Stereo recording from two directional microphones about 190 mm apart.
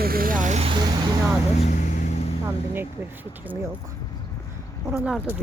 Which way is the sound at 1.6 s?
40° left (ahead or behind).